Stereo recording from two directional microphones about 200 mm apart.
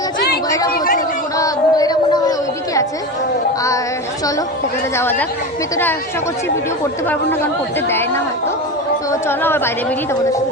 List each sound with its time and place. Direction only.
0.7 s chatter: 45° left (ahead or behind)
1.4 s a sound: 20° left (ahead or behind)
7.1 s speech: 10° left (ahead or behind)
9.2 s speech: 10° left (ahead or behind)